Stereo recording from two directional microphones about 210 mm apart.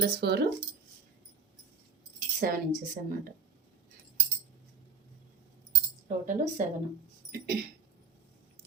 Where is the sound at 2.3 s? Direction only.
45° right (ahead or behind).